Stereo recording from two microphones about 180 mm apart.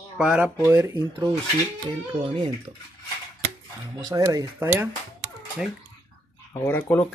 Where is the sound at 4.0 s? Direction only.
15° right (ahead or behind).